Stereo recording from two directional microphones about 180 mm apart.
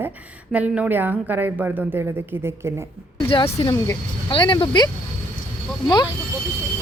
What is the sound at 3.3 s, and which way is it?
Speech, 30° left (ahead or behind).